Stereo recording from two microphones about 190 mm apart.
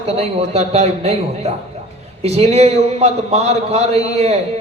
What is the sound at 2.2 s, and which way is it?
A man's voice, 35° right (ahead or behind).